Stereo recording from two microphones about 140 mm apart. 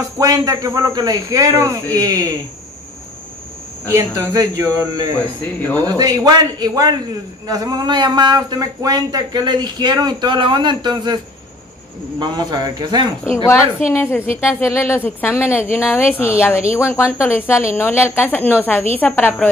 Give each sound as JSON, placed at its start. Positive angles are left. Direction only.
{"t": 0.2, "sound": "a man's voice", "side_deg": -25}
{"t": 3.9, "sound": "a man's voice", "side_deg": -20}
{"t": 12.2, "sound": "speech", "side_deg": -30}
{"t": 13.2, "sound": "a woman's voice", "side_deg": 20}